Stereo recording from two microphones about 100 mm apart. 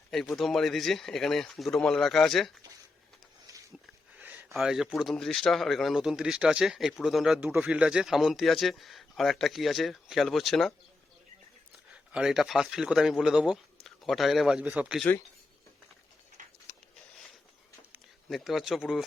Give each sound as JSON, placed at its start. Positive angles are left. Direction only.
{"t": 0.1, "sound": "speech", "side_deg": 5}
{"t": 4.2, "sound": "a sound", "side_deg": -15}
{"t": 4.5, "sound": "speech", "side_deg": -5}
{"t": 12.1, "sound": "a man's voice", "side_deg": -5}
{"t": 18.3, "sound": "speech", "side_deg": 0}